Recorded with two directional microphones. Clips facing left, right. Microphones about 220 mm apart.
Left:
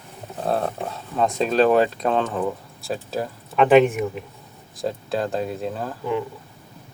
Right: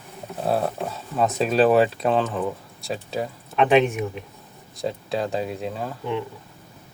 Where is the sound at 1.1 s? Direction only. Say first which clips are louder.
Left 1 dB; 5° right (ahead or behind).